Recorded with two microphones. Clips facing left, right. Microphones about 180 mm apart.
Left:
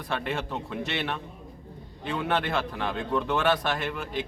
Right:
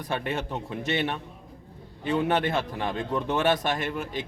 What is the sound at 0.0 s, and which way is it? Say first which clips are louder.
A man's voice: right 1 dB; 20° right (ahead or behind).